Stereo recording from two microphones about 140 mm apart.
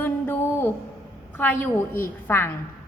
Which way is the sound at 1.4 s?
15° left (ahead or behind).